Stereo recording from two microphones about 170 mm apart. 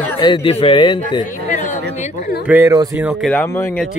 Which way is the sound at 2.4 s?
10° right (ahead or behind).